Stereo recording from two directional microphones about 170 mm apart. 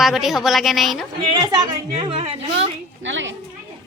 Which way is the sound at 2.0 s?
35° right (ahead or behind).